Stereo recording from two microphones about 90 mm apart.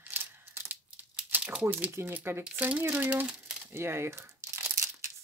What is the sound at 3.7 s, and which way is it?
Crumpling, 30° right (ahead or behind).